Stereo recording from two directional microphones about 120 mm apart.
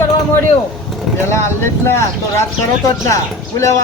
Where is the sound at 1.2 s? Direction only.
20° left (ahead or behind).